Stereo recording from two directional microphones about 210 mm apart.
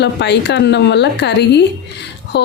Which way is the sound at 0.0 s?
55° left (ahead or behind).